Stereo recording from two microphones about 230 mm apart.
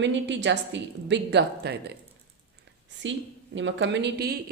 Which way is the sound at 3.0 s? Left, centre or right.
Right.